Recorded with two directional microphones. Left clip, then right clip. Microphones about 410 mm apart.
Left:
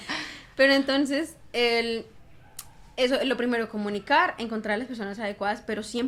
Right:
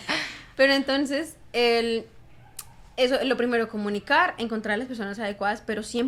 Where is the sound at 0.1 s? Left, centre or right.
Right.